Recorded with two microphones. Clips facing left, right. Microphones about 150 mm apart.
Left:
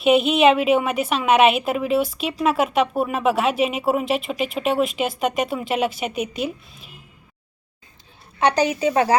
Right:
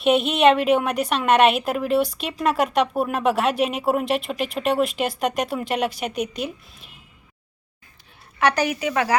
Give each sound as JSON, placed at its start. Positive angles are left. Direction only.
{"t": 0.0, "sound": "speech", "side_deg": 0}
{"t": 8.4, "sound": "speech", "side_deg": 20}